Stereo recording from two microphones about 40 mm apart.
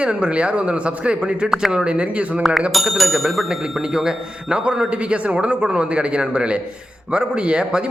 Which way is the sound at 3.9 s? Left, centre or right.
Centre.